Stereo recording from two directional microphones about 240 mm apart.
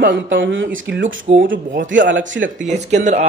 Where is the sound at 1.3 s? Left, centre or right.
Right.